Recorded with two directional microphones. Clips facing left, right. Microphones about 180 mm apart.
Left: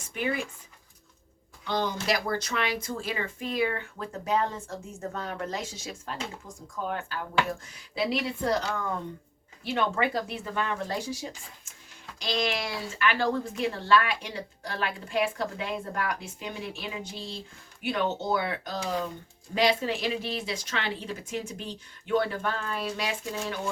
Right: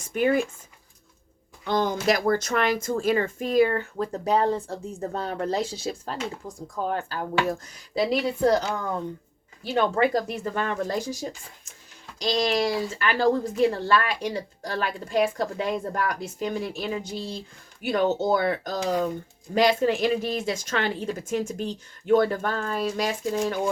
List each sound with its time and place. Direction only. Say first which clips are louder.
0.1 s a woman's voice: right 8 dB; 45° right (ahead or behind)
1.6 s a woman's voice: right 5 dB; 50° right (ahead or behind)
9.6 s a woman's voice: right 5 dB; 40° right (ahead or behind)